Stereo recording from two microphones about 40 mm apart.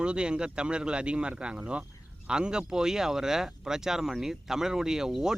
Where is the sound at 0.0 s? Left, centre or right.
Right.